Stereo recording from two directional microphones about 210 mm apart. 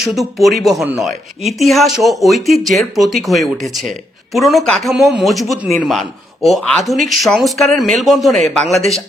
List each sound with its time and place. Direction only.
0.0 s speech: centre (ahead or behind)